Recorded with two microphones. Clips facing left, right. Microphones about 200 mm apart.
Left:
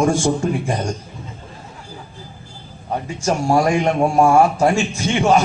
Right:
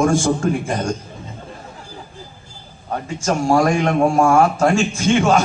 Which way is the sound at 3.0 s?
20° left (ahead or behind).